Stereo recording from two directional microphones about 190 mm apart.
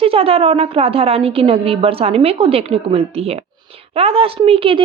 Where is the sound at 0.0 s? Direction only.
30° right (ahead or behind).